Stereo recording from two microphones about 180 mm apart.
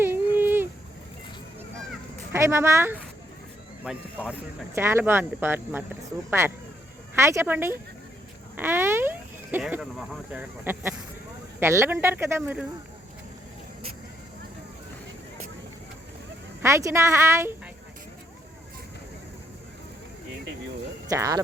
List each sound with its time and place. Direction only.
0.3 s a sound: 10° right (ahead or behind)
2.3 s speech: 15° right (ahead or behind)
12.4 s speech: centre (ahead or behind)
16.6 s speech: 15° right (ahead or behind)
21.1 s speech: 20° right (ahead or behind)